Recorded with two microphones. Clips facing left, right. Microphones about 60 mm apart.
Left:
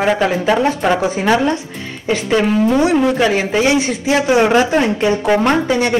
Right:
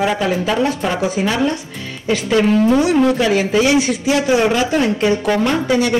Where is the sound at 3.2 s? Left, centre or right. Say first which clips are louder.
Even; left.